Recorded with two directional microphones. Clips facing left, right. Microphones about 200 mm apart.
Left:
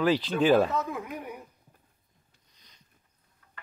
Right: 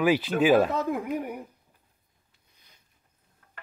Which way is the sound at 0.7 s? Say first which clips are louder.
Right 4 dB; 60° right (ahead or behind).